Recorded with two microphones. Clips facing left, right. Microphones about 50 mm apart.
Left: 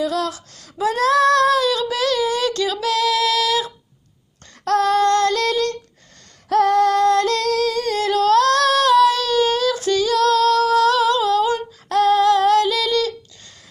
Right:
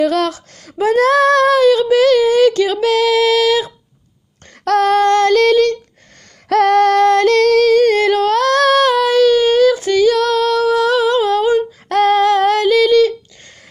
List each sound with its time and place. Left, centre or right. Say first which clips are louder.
0.0 s a sound: right 7 dB; right
0.6 s female singing: right 6 dB; right
4.6 s child singing: right 4 dB; right
6.5 s female singing: right 4 dB; right
7.1 s female singing: right 6 dB; right